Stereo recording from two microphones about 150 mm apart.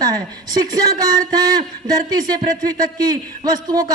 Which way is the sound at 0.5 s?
25° right (ahead or behind).